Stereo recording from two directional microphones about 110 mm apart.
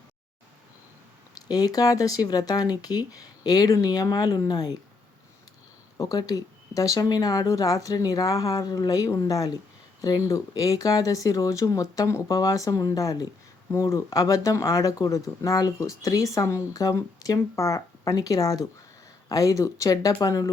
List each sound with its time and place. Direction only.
1.4 s speech: 35° left (ahead or behind)
6.0 s speech: 35° left (ahead or behind)